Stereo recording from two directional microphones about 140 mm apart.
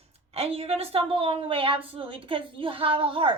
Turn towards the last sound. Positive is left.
turn(degrees=-40)  # may be behind; listen again after turning